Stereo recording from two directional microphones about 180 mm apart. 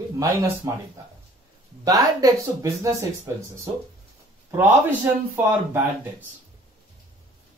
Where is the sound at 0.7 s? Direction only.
20° right (ahead or behind).